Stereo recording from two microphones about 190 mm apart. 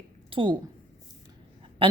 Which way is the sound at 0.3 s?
25° right (ahead or behind).